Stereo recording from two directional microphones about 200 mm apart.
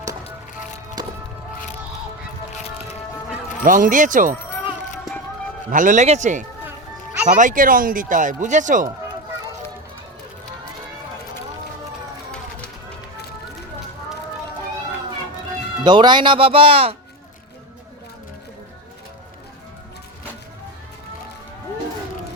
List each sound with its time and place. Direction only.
3.6 s speech: 40° right (ahead or behind)
5.7 s speech: 40° right (ahead or behind)
6.7 s music: 5° right (ahead or behind)
7.3 s speech: 40° right (ahead or behind)
15.8 s speech: 20° right (ahead or behind)